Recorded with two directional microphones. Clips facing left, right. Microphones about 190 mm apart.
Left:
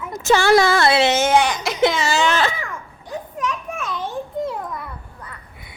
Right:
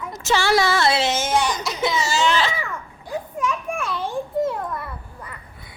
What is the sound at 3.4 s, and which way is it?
Children playing, 10° right (ahead or behind).